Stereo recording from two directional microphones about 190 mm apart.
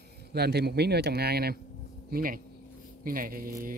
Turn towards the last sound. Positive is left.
turn(degrees=-50)  # may be behind; listen again after turning